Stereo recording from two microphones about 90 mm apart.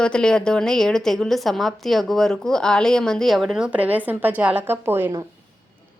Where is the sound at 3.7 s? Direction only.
15° right (ahead or behind).